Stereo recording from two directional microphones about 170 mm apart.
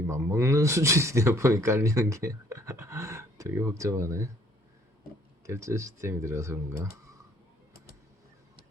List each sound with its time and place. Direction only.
0.1 s a man's voice: 15° right (ahead or behind)
5.5 s a man's voice: 15° right (ahead or behind)